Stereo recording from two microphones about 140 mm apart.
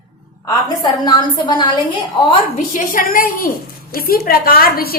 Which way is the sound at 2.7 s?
75° left (ahead or behind).